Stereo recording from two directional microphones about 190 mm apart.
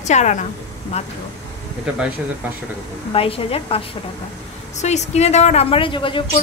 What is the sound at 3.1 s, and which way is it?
A woman's voice, 30° left (ahead or behind).